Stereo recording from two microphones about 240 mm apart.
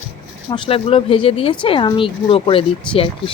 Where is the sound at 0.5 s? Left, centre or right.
Left.